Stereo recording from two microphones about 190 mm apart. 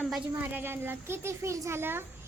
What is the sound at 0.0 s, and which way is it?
Speech, 10° right (ahead or behind).